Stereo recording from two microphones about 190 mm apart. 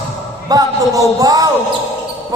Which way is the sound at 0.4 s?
20° right (ahead or behind).